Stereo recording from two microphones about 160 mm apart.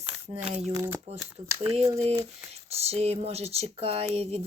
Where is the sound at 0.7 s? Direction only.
15° right (ahead or behind).